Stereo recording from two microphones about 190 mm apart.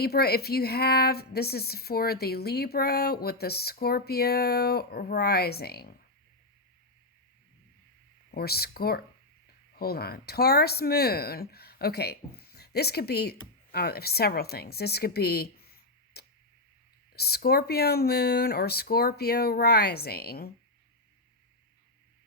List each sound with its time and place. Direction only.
0.0 s a woman's voice: 55° left (ahead or behind)
8.3 s a woman's voice: 55° left (ahead or behind)